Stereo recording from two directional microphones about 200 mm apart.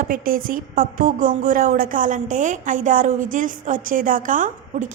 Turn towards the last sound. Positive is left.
turn(degrees=-40)  # may be behind; listen again after turning